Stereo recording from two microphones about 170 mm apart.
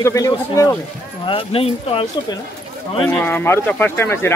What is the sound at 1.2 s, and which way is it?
Speech, 30° left (ahead or behind).